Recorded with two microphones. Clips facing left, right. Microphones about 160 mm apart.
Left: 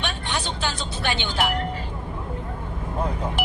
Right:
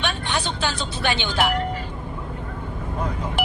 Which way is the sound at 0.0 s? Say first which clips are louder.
Right 3 dB; 75° right (ahead or behind).